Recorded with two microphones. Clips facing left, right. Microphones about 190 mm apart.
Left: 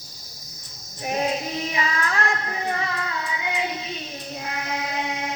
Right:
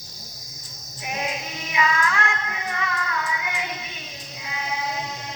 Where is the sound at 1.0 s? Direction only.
35° left (ahead or behind).